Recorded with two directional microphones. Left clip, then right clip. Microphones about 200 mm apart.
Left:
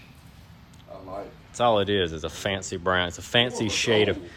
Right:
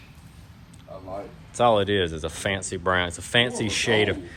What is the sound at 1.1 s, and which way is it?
Speech, 10° left (ahead or behind).